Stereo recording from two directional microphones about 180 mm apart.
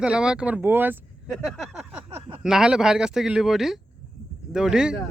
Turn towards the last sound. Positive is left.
turn(degrees=-5)  # may be behind; listen again after turning